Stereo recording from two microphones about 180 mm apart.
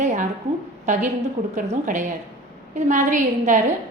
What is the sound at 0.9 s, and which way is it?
A woman's voice, 40° right (ahead or behind).